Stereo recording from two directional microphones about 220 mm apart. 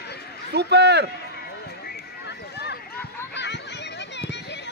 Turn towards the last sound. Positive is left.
turn(degrees=50)  # may be behind; listen again after turning